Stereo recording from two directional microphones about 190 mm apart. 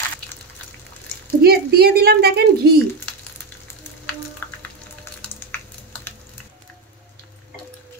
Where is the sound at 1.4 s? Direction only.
55° right (ahead or behind).